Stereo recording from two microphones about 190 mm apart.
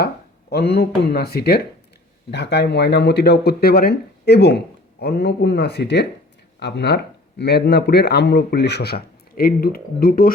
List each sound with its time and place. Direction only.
0.5 s speech: 60° left (ahead or behind)